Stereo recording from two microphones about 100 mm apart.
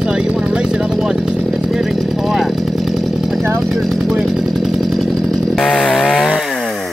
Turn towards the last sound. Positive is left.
turn(degrees=5)  # may be behind; listen again after turning